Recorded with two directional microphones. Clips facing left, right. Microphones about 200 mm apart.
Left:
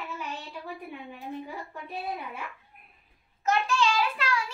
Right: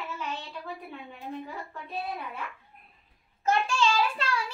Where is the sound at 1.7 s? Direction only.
10° left (ahead or behind).